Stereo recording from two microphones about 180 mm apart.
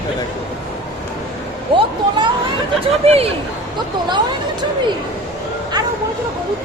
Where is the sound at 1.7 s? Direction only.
25° right (ahead or behind).